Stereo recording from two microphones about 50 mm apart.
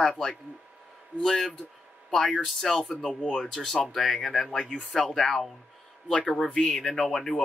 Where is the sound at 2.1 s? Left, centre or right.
Centre.